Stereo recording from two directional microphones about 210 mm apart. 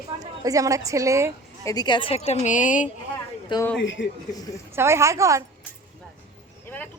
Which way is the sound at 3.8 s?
65° left (ahead or behind).